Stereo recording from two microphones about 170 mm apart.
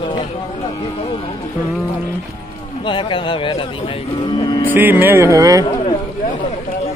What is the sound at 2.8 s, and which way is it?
Speech, 30° left (ahead or behind).